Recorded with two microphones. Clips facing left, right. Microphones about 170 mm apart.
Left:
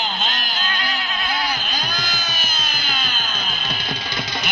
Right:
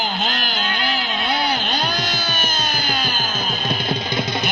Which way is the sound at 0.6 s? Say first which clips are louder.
Right 2 dB; 25° right (ahead or behind).